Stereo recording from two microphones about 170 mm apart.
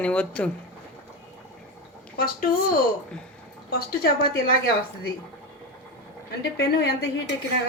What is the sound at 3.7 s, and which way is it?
Speech, 60° left (ahead or behind).